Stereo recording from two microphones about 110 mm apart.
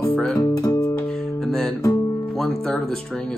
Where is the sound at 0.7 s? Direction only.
25° left (ahead or behind).